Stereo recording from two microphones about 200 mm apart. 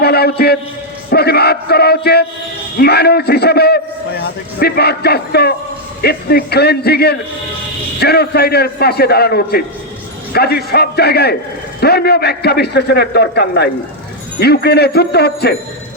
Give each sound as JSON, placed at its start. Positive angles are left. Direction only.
{"t": 0.0, "sound": "a man's voice", "side_deg": 50}